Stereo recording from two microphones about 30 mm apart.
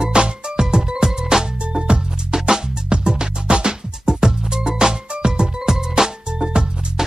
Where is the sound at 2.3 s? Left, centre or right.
Right.